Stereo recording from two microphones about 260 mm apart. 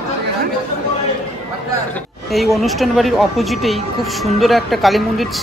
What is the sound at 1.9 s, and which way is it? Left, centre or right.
Speech, centre.